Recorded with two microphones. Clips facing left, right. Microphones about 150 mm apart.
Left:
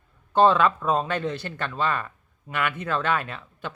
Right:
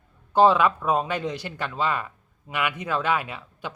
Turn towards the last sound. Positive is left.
turn(degrees=-10)  # may be behind; listen again after turning